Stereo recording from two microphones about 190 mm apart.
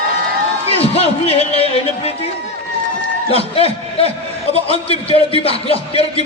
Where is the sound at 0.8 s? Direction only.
30° left (ahead or behind).